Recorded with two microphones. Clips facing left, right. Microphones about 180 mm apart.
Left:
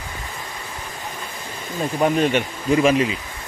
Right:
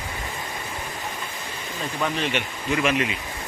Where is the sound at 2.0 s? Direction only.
45° left (ahead or behind).